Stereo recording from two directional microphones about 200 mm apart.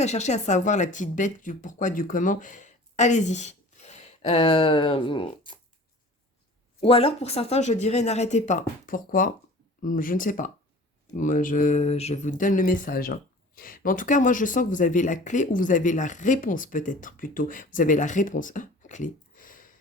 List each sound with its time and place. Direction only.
0.0 s speech: 35° left (ahead or behind)
6.7 s speech: 30° left (ahead or behind)